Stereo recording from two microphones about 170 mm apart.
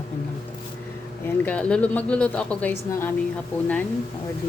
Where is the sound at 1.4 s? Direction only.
5° left (ahead or behind).